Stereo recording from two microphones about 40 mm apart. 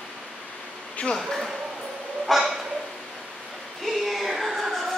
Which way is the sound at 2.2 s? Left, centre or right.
Centre.